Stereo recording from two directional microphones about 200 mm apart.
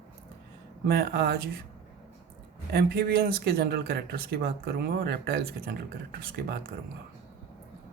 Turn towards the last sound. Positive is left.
turn(degrees=-50)  # may be behind; listen again after turning